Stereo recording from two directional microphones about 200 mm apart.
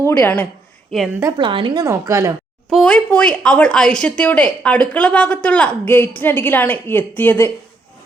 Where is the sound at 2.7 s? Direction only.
5° left (ahead or behind).